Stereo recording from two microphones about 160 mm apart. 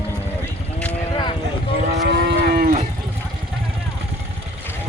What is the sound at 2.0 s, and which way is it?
Moo, 90° right.